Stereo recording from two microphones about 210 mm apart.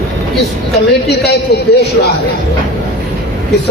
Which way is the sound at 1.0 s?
50° left (ahead or behind).